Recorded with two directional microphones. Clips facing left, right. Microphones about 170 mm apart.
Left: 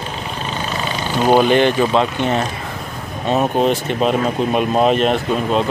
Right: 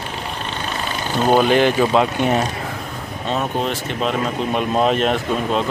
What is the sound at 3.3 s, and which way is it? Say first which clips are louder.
Speech: left 6 dB; 15° left (ahead or behind).